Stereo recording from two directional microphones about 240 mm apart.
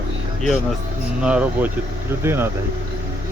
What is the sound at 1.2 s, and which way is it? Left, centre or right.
Speech, centre.